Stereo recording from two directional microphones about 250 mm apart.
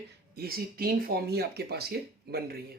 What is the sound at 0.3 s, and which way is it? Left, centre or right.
Speech, right.